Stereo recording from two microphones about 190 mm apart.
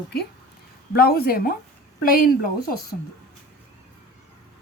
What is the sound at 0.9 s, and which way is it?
A woman's voice, 55° left (ahead or behind).